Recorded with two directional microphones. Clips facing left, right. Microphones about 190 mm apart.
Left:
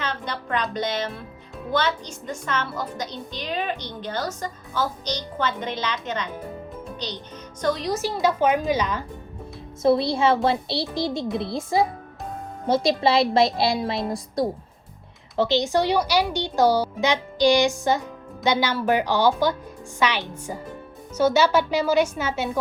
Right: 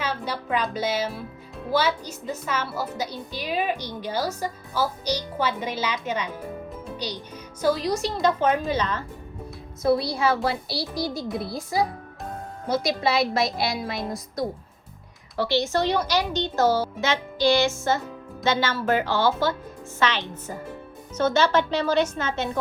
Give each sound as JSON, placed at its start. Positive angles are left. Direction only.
{"t": 0.0, "sound": "music", "side_deg": -5}
{"t": 1.7, "sound": "a woman's voice", "side_deg": -5}
{"t": 6.8, "sound": "music", "side_deg": -10}
{"t": 7.6, "sound": "speech", "side_deg": 0}
{"t": 9.8, "sound": "a child's voice", "side_deg": 25}
{"t": 15.4, "sound": "speech", "side_deg": 20}